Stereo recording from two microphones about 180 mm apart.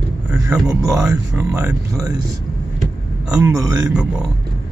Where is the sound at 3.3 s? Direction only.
15° right (ahead or behind).